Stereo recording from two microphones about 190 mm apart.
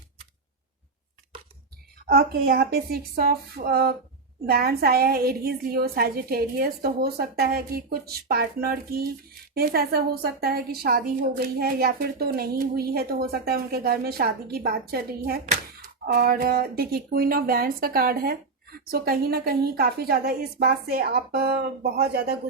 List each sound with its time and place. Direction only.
2.0 s a woman's voice: 55° right (ahead or behind)